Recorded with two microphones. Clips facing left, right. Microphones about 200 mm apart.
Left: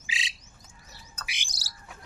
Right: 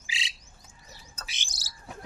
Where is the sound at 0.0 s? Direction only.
20° left (ahead or behind).